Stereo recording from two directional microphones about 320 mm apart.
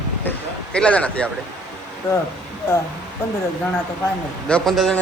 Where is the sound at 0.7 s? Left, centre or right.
Centre.